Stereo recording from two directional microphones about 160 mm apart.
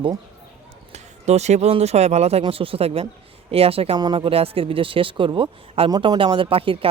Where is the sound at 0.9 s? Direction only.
45° right (ahead or behind).